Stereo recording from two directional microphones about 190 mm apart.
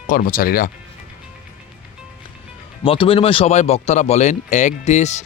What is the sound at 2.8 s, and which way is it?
Speech, 25° left (ahead or behind).